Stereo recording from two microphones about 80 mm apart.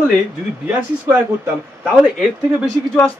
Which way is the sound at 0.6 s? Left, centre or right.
Centre.